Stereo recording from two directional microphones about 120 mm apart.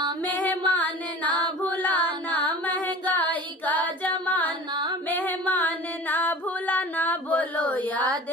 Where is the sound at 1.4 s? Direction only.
15° left (ahead or behind).